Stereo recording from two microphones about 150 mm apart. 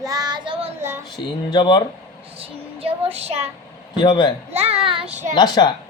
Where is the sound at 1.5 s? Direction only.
30° left (ahead or behind).